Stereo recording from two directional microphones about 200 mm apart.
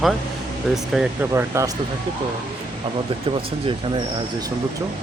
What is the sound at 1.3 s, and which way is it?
Speech, 15° right (ahead or behind).